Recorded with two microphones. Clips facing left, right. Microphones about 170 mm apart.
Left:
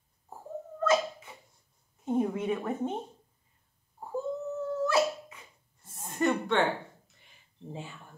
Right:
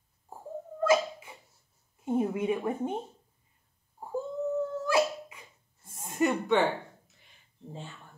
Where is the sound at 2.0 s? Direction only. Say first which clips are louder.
Right 1 dB; 5° right (ahead or behind).